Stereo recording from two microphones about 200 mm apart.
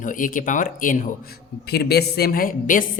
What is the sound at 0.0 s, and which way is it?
Speech, 40° left (ahead or behind).